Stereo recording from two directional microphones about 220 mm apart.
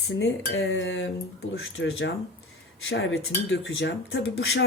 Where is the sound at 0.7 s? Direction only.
55° left (ahead or behind).